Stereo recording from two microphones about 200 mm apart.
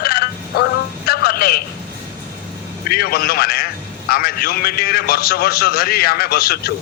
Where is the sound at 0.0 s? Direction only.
50° left (ahead or behind).